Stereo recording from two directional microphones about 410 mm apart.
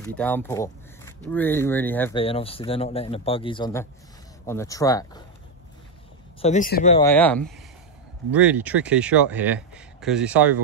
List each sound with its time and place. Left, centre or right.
0.0 s speech: centre
6.4 s speech: centre
7.1 s speech: centre